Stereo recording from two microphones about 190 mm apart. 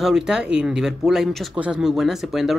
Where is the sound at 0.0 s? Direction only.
5° right (ahead or behind).